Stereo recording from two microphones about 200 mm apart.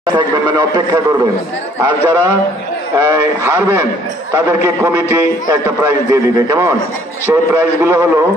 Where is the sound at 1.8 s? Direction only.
15° right (ahead or behind).